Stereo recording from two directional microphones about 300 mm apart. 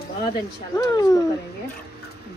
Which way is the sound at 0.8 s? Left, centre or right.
Centre.